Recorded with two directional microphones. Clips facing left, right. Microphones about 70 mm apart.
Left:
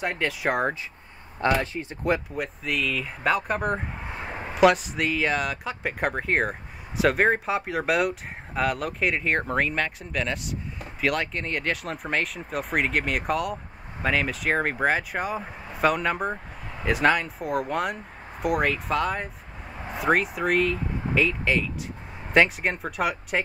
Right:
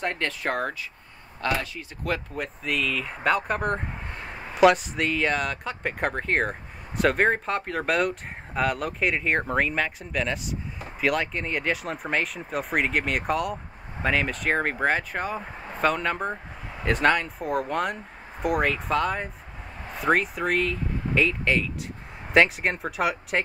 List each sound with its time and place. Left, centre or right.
0.0 s speech: centre
1.6 s speech: left
2.3 s speech: centre